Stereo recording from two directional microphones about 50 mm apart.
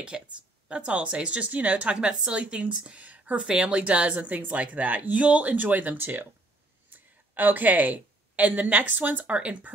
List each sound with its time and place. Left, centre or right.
0.1 s a woman's voice: centre
3.0 s a sound: right
3.4 s a woman's voice: right